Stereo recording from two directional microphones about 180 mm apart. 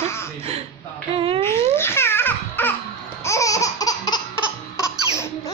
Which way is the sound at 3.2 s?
15° left (ahead or behind).